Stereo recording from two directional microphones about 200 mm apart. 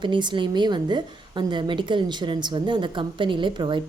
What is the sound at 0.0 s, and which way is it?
A woman's voice, 25° right (ahead or behind).